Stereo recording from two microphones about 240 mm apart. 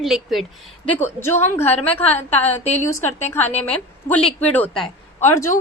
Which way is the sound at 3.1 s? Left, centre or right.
Left.